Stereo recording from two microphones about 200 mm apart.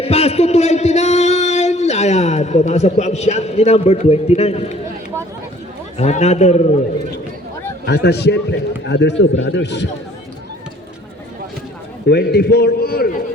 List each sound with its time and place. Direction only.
0.0 s speech: 30° left (ahead or behind)
6.0 s a man's voice: 35° left (ahead or behind)
7.9 s a man's voice: 55° left (ahead or behind)
12.0 s a man's voice: 55° left (ahead or behind)